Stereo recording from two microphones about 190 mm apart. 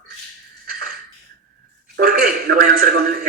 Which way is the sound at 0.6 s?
50° right (ahead or behind).